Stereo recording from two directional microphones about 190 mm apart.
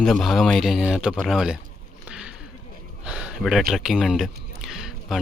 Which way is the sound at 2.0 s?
5° right (ahead or behind).